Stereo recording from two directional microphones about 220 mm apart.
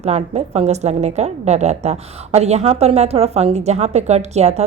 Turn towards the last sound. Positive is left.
turn(degrees=-30)  # may be behind; listen again after turning